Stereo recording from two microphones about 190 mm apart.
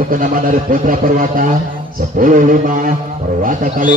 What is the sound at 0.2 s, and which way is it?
A man's voice, 45° right (ahead or behind).